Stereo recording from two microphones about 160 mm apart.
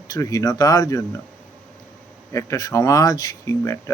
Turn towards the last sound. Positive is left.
turn(degrees=20)  # may be behind; listen again after turning